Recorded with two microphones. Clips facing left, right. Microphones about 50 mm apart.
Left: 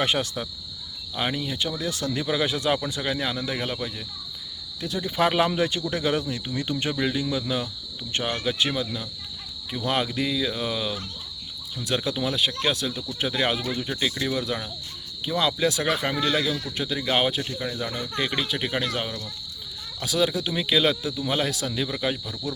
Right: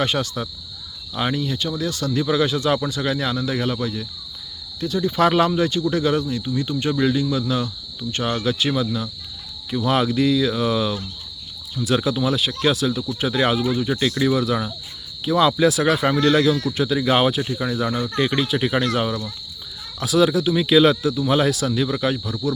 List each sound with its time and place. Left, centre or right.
0.0 s speech: centre
1.1 s speech: centre
1.9 s speech: left
2.1 s speech: centre
5.0 s speech: centre; by 6.9 s left
6.9 s speech: centre
17.4 s speech: centre